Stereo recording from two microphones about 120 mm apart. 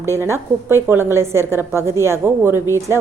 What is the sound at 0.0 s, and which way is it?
A woman's voice, 20° right (ahead or behind).